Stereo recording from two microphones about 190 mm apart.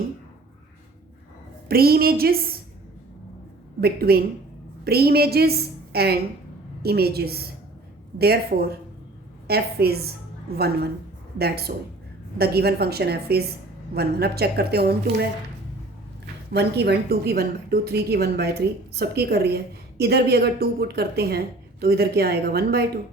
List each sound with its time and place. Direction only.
1.6 s a woman's voice: 50° right (ahead or behind)
3.8 s a woman's voice: 55° right (ahead or behind)
16.5 s a woman's voice: 60° right (ahead or behind)